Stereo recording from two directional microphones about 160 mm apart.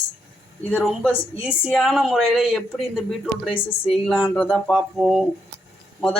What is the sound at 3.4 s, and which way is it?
Speech, 35° left (ahead or behind).